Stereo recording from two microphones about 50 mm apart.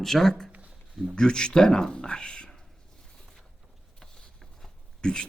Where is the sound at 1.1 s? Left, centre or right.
Centre.